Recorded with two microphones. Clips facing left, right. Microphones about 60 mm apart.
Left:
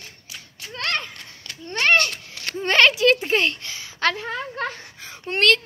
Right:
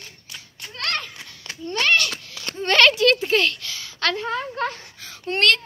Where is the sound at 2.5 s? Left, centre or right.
Centre.